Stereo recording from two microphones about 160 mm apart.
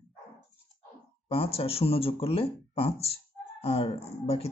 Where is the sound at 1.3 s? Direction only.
35° left (ahead or behind).